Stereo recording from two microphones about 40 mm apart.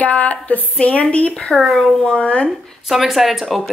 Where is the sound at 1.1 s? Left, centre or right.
Left.